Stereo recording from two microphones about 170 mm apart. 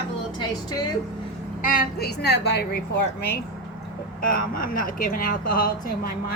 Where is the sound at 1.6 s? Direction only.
60° left (ahead or behind).